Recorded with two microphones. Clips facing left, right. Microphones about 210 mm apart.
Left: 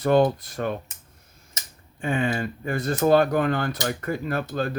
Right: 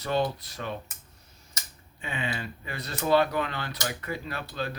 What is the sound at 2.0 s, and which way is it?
Speech, 50° left (ahead or behind).